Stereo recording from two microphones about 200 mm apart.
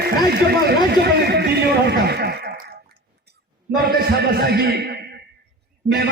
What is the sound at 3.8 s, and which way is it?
Music, 50° right (ahead or behind).